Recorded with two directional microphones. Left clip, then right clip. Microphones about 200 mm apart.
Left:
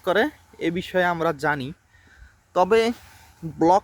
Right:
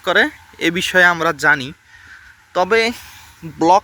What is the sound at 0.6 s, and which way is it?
Speech, 5° right (ahead or behind).